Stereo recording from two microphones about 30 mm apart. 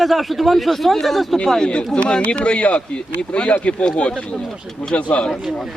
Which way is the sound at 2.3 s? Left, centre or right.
Left.